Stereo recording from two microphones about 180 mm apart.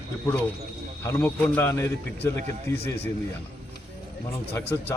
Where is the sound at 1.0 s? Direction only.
15° left (ahead or behind).